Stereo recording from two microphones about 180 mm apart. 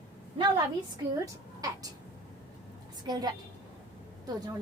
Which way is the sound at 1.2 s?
20° right (ahead or behind).